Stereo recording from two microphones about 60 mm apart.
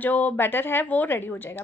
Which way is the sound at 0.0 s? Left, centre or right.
Left.